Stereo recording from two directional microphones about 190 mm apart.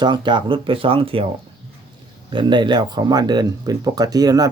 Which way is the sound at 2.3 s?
25° right (ahead or behind).